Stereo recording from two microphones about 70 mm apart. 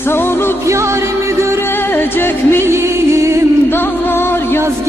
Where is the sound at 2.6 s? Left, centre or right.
Right.